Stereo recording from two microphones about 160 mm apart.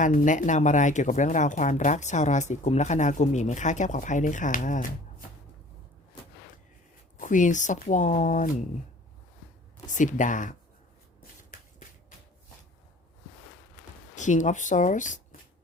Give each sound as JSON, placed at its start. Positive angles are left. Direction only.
{"t": 0.0, "sound": "speech", "side_deg": 50}
{"t": 7.2, "sound": "speech", "side_deg": 50}
{"t": 9.8, "sound": "speech", "side_deg": 50}
{"t": 14.2, "sound": "speech", "side_deg": 50}